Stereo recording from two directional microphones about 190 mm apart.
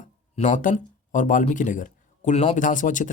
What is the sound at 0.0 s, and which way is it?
Speech, 40° left (ahead or behind).